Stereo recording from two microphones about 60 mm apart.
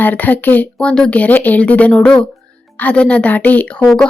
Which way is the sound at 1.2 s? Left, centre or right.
Left.